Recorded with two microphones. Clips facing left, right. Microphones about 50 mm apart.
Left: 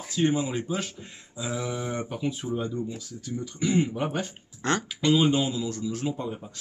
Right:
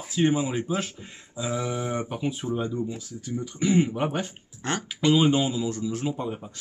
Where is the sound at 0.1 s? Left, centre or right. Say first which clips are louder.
Right 2 dB; centre.